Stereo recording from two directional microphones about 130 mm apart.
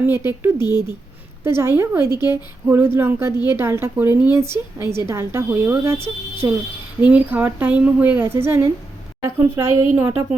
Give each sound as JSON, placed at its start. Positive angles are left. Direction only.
{"t": 0.3, "sound": "a woman's voice", "side_deg": -20}
{"t": 2.0, "sound": "speech", "side_deg": 30}
{"t": 2.3, "sound": "a woman's voice", "side_deg": -15}